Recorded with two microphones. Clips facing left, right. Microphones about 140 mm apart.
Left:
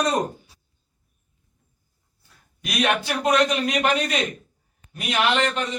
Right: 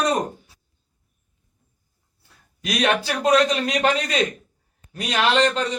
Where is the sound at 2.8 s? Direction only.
35° right (ahead or behind).